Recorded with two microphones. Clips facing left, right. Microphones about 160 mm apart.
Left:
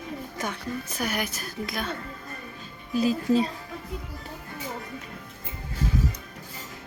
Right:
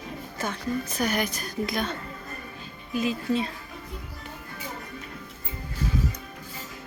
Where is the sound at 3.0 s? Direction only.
35° left (ahead or behind).